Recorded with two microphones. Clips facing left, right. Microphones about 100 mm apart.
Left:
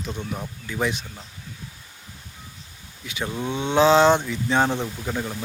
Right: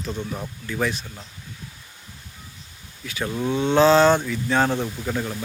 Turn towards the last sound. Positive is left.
turn(degrees=5)  # may be behind; listen again after turning